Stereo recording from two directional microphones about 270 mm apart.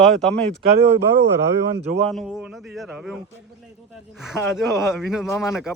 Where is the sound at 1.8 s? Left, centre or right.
Right.